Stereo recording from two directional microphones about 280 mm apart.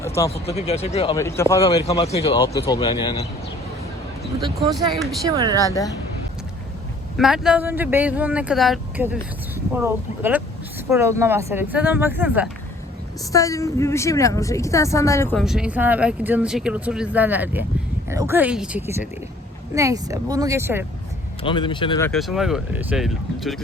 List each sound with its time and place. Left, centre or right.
0.0 s a sound: centre
0.4 s a man's voice: left
4.6 s speech: centre
5.6 s a woman's voice: centre
7.2 s a woman's voice: centre
13.3 s a woman's voice: centre
21.4 s a woman's voice: centre